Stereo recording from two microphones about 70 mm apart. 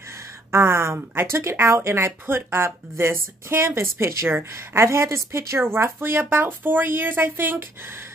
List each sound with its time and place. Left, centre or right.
0.5 s speech: right